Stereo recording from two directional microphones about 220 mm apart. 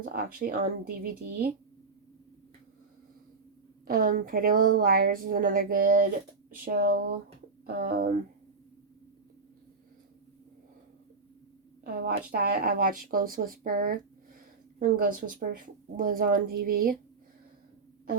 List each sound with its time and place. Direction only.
0.0 s speech: 40° right (ahead or behind)
3.8 s speech: 40° right (ahead or behind)
12.0 s speech: 45° right (ahead or behind)